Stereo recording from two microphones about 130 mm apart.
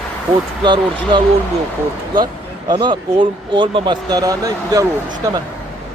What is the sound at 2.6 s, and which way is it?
Speech, 40° right (ahead or behind).